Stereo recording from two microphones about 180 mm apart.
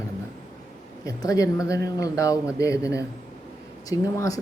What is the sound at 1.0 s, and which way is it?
Speech, 20° left (ahead or behind).